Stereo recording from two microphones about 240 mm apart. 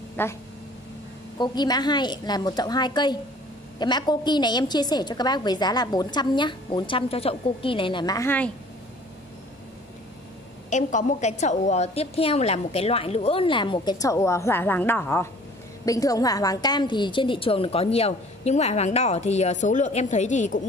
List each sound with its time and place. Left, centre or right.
0.2 s a woman's voice: centre
1.4 s a woman's voice: centre
10.7 s a woman's voice: left